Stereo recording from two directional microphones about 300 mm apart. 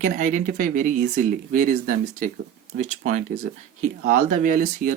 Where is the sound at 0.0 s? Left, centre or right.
Right.